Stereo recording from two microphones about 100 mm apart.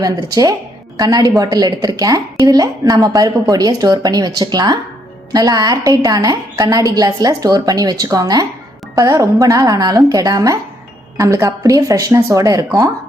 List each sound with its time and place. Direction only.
0.0 s a woman's voice: 40° right (ahead or behind)